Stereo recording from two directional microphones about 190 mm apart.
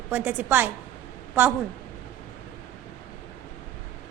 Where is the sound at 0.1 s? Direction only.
10° right (ahead or behind).